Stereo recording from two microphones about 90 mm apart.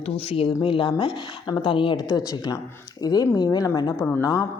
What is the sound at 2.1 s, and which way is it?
A woman's voice, 45° left (ahead or behind).